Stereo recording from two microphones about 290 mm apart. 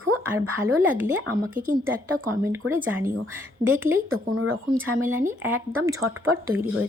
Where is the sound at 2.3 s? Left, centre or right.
Centre.